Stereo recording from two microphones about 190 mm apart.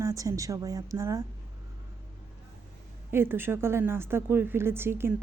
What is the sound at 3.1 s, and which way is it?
A woman's voice, 10° right (ahead or behind).